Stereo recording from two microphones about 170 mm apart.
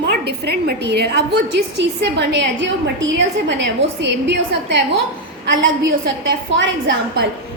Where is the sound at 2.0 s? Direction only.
85° right.